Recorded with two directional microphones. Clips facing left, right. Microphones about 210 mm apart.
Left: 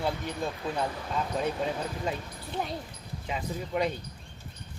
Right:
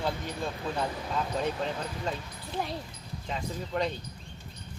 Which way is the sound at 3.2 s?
10° left (ahead or behind).